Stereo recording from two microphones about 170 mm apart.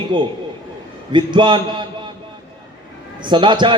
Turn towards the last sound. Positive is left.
turn(degrees=-30)  # may be behind; listen again after turning